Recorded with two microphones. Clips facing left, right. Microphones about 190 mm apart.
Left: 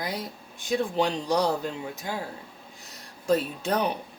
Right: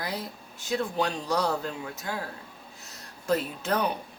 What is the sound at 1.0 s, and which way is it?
Speech, 15° left (ahead or behind).